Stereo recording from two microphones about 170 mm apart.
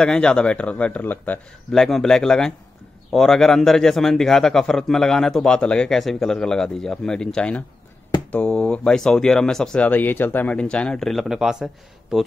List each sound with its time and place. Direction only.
0.0 s a man's voice: 5° left (ahead or behind)